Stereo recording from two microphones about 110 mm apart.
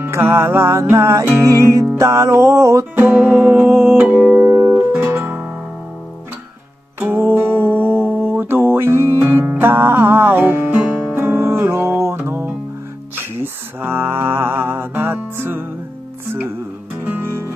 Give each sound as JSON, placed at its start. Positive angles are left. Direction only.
{"t": 0.0, "sound": "music", "side_deg": -25}
{"t": 3.1, "sound": "music", "side_deg": -15}
{"t": 7.0, "sound": "music", "side_deg": -20}
{"t": 13.1, "sound": "mantra", "side_deg": -20}
{"t": 17.0, "sound": "music", "side_deg": -20}